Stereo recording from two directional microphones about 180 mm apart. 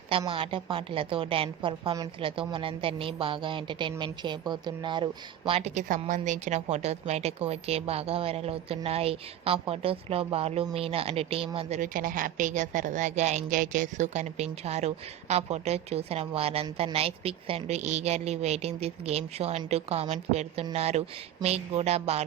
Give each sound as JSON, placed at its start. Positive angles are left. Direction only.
{"t": 0.1, "sound": "a woman's voice", "side_deg": -30}
{"t": 5.5, "sound": "a woman's voice", "side_deg": -35}
{"t": 11.8, "sound": "a woman's voice", "side_deg": -50}